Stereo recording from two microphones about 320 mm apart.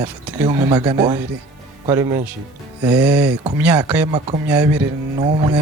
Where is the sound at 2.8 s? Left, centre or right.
Centre.